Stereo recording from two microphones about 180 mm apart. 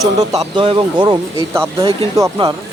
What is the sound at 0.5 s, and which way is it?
Speech, 25° right (ahead or behind).